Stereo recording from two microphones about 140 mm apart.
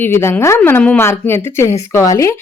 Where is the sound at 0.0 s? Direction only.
15° left (ahead or behind).